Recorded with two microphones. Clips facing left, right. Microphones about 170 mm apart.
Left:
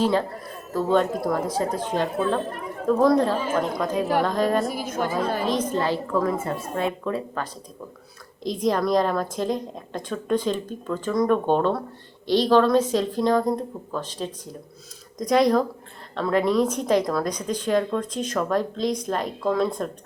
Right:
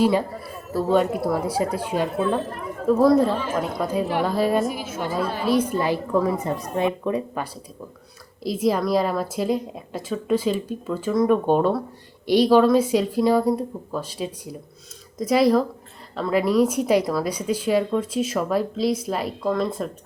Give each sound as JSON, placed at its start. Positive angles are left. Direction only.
{"t": 0.0, "sound": "a woman's voice", "side_deg": -10}
{"t": 4.6, "sound": "a woman's voice", "side_deg": 40}
{"t": 5.5, "sound": "a woman's voice", "side_deg": -10}
{"t": 8.4, "sound": "a woman's voice", "side_deg": -5}